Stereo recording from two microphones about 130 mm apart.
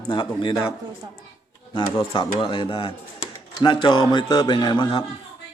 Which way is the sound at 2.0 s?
40° left (ahead or behind).